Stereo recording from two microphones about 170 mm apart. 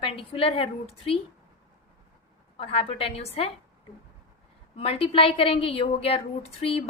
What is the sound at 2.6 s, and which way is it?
Speech, 35° left (ahead or behind).